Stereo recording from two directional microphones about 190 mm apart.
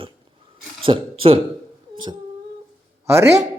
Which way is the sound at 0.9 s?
25° right (ahead or behind).